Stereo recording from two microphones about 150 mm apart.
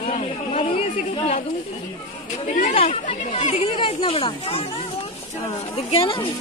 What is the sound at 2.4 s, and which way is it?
A woman's voice, 50° left (ahead or behind).